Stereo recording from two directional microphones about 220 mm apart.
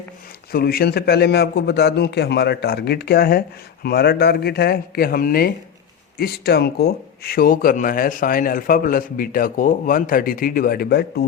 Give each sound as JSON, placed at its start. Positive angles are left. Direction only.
{"t": 0.5, "sound": "a man's voice", "side_deg": 45}